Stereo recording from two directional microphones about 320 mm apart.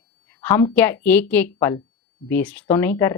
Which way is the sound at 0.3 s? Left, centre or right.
Centre.